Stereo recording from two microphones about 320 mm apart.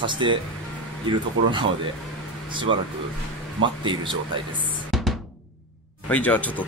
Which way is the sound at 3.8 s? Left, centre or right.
Centre.